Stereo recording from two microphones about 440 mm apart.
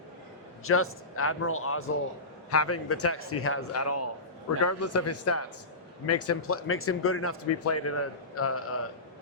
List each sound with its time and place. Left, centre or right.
0.6 s a man's voice: left